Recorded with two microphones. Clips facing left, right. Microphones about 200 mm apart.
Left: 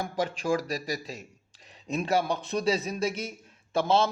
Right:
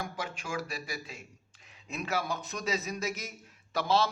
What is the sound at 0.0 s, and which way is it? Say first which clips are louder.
A man's voice: left 8 dB; 35° left (ahead or behind).